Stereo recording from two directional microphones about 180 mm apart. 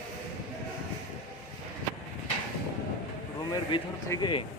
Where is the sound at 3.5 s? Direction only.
20° left (ahead or behind).